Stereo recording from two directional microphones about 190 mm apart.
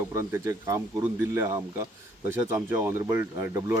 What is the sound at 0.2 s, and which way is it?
Speech, 15° right (ahead or behind).